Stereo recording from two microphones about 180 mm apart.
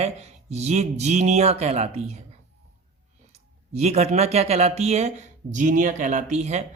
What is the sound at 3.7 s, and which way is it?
Speech, 35° right (ahead or behind).